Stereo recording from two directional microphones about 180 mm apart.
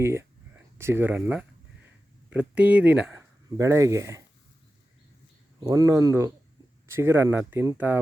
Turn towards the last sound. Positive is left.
turn(degrees=-10)  # may be behind; listen again after turning